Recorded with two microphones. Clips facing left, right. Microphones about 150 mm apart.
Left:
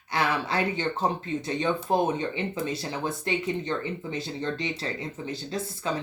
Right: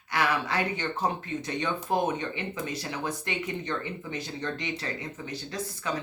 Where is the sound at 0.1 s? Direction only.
30° left (ahead or behind).